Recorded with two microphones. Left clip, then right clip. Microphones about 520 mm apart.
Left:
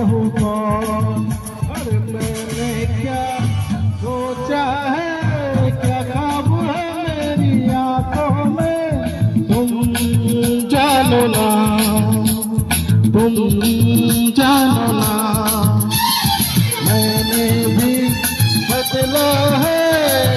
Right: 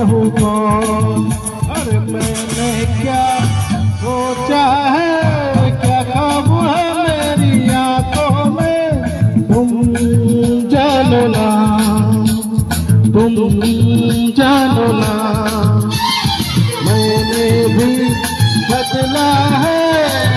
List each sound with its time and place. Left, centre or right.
0.0 s music: left
4.5 s music: left
10.0 s music: left